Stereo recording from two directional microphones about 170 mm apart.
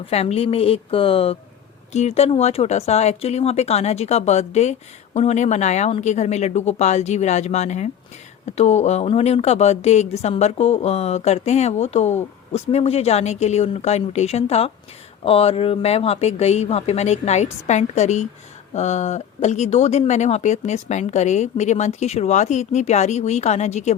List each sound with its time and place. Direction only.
0.1 s speech: 35° left (ahead or behind)